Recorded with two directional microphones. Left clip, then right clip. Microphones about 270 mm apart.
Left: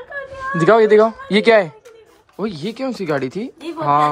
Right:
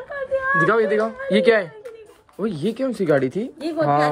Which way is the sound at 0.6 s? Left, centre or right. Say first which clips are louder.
Left 11 dB; centre.